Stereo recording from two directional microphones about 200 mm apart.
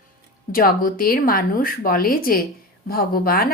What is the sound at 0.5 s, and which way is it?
Speech, 45° left (ahead or behind).